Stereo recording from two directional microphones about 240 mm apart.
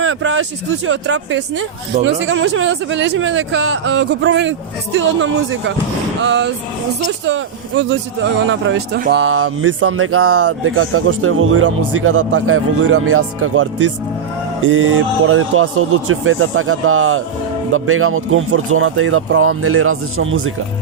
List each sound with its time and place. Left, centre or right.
0.0 s a man's voice: right